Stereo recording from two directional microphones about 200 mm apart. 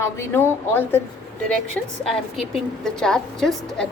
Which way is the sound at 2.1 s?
Centre (ahead or behind).